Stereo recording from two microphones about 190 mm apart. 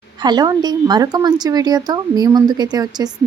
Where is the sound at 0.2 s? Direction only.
20° right (ahead or behind).